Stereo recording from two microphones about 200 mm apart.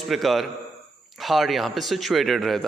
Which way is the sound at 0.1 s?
Centre (ahead or behind).